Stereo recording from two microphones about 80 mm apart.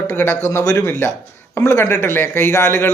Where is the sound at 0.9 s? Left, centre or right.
Left.